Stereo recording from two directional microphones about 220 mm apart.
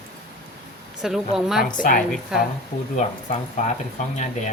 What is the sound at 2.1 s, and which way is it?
Speech, centre (ahead or behind).